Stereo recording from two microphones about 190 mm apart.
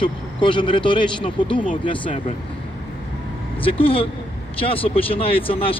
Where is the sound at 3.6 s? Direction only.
30° left (ahead or behind).